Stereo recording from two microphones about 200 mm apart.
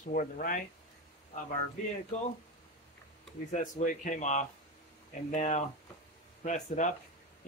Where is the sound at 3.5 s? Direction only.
40° left (ahead or behind).